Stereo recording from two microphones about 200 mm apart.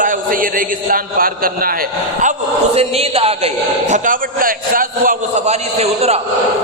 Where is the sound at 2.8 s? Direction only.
30° right (ahead or behind).